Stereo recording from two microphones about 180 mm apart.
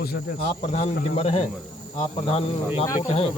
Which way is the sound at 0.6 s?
40° left (ahead or behind).